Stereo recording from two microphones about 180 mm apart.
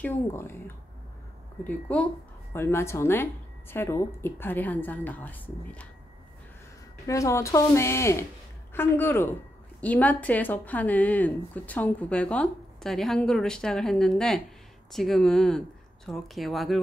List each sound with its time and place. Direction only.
0.0 s a woman's voice: 10° left (ahead or behind)
1.6 s a woman's voice: 10° left (ahead or behind)
7.1 s a woman's voice: 15° left (ahead or behind); by 16.8 s centre (ahead or behind)